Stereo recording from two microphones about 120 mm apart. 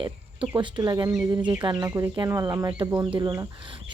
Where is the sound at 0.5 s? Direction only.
40° right (ahead or behind).